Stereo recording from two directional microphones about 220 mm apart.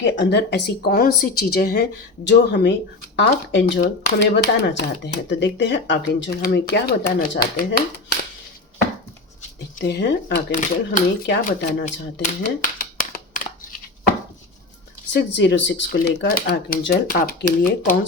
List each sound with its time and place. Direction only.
0.0 s speech: 50° left (ahead or behind)
9.7 s speech: 45° left (ahead or behind)
12.8 s a sound: 40° left (ahead or behind)
15.1 s speech: 50° left (ahead or behind)